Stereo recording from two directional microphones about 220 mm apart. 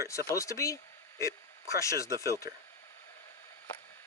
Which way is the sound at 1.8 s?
15° left (ahead or behind).